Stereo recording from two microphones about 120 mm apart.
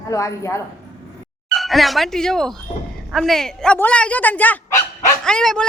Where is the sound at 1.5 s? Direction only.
Centre (ahead or behind).